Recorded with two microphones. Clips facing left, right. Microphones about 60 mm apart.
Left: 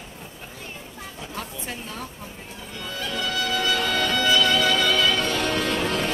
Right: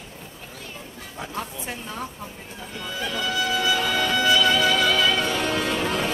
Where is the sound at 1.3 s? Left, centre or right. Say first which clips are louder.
Right 1 dB; right.